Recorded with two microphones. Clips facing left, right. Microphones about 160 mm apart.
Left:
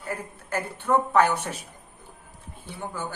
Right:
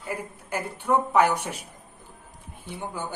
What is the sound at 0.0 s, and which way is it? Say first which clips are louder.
A woman's voice: even; 10° right (ahead or behind).